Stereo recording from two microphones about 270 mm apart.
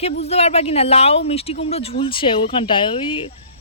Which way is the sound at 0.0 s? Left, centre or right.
Left.